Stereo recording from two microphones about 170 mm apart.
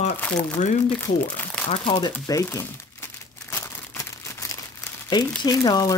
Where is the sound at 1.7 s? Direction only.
30° left (ahead or behind).